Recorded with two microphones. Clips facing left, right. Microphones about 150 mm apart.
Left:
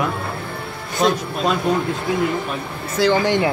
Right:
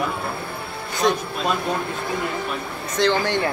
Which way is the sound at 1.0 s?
90° left.